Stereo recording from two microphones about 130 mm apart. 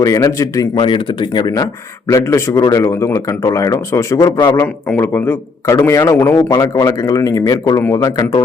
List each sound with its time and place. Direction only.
0.0 s speech: 25° left (ahead or behind)
0.8 s speech: 40° left (ahead or behind)